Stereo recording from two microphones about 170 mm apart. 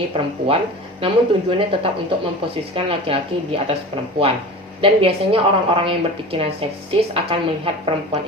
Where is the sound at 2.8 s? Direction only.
35° right (ahead or behind).